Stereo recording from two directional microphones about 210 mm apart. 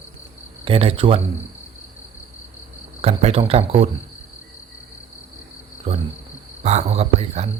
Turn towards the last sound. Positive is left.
turn(degrees=-30)  # may be behind; listen again after turning